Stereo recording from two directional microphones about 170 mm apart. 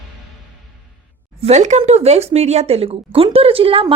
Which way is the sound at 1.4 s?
45° right (ahead or behind).